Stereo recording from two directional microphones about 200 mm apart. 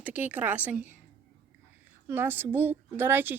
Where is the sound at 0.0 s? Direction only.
10° right (ahead or behind).